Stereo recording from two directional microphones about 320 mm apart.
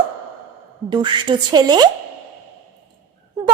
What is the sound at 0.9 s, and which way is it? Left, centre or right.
Speech, centre.